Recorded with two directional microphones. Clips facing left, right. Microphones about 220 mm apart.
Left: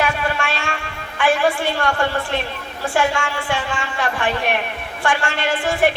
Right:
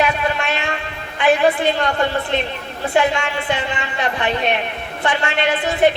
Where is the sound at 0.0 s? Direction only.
20° right (ahead or behind).